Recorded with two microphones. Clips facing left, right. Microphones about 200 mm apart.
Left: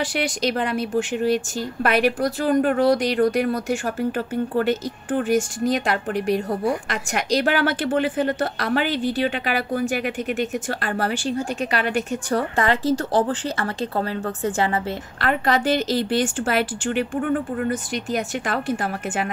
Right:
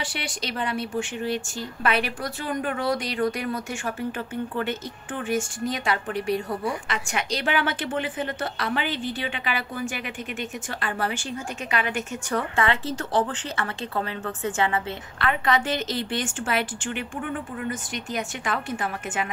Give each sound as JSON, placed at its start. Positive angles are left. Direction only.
{"t": 0.0, "sound": "a woman's voice", "side_deg": 40}